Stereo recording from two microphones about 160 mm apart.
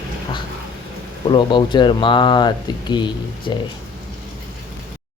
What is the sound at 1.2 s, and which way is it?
Speech, 30° left (ahead or behind).